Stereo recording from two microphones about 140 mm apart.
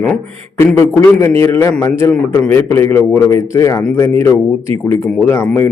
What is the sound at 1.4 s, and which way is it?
A man's voice, 15° left (ahead or behind).